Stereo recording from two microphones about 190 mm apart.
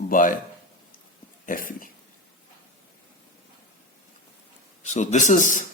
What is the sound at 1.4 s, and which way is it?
Speech, 45° left (ahead or behind).